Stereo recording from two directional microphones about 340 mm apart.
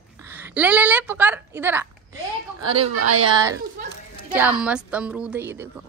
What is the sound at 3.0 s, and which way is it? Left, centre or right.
Speech, right.